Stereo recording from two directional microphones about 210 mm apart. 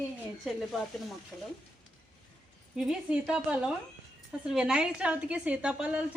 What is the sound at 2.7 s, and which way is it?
A woman's voice, 5° right (ahead or behind).